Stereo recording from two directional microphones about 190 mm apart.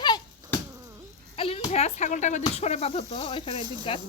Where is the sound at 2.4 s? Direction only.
35° left (ahead or behind).